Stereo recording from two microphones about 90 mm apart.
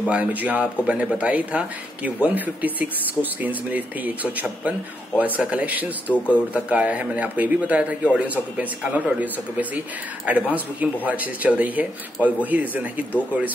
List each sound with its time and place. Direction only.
0.0 s a man's voice: 15° right (ahead or behind)
6.0 s a man's voice: 20° left (ahead or behind)
6.5 s a man's voice: 15° right (ahead or behind)